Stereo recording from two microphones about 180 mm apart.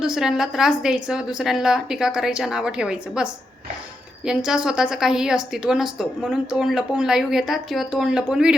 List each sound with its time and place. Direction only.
0.0 s a woman's voice: 5° right (ahead or behind)
4.3 s a woman's voice: 5° right (ahead or behind)